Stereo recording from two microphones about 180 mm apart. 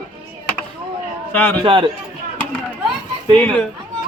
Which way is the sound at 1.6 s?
30° right (ahead or behind).